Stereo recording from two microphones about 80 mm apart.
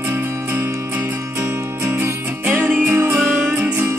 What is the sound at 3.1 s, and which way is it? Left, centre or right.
Music, centre.